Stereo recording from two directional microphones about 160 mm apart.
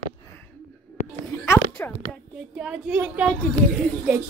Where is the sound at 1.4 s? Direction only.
15° left (ahead or behind).